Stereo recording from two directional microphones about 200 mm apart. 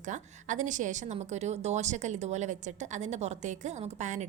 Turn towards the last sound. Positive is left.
turn(degrees=-35)  # may be behind; listen again after turning